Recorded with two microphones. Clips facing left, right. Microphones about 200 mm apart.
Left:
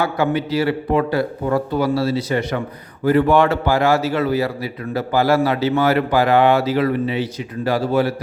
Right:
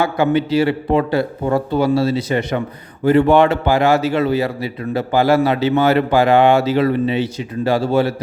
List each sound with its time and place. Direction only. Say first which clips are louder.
0.0 s a man's voice: right 3 dB; 20° right (ahead or behind)